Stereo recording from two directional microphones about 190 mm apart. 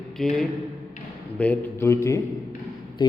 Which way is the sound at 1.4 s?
10° left (ahead or behind).